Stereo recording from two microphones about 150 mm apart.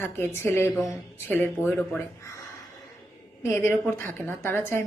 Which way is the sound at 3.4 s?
15° left (ahead or behind).